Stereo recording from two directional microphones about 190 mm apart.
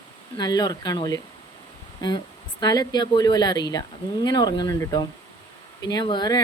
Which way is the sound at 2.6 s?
20° left (ahead or behind).